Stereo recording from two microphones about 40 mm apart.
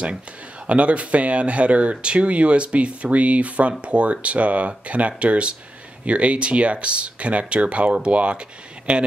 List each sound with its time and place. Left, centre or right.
0.7 s speech: right